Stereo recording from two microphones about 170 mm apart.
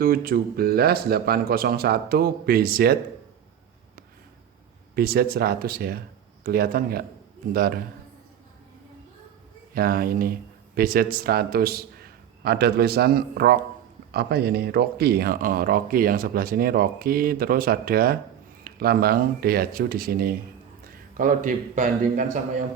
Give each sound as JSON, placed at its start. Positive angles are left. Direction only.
{"t": 0.0, "sound": "speech", "side_deg": -60}
{"t": 4.9, "sound": "speech", "side_deg": -65}
{"t": 9.7, "sound": "a man's voice", "side_deg": -60}